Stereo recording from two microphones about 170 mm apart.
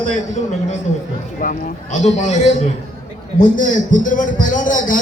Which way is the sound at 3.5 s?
50° left (ahead or behind).